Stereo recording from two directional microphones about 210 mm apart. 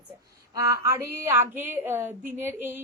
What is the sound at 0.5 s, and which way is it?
Speech, 15° right (ahead or behind).